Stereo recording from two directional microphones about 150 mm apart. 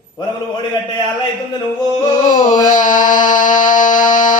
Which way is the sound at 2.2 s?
60° left (ahead or behind).